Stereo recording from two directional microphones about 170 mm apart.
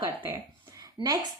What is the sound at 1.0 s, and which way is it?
Speech, 30° right (ahead or behind).